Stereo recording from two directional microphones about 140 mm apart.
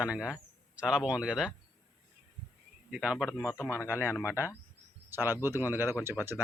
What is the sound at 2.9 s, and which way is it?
Speech, 5° right (ahead or behind).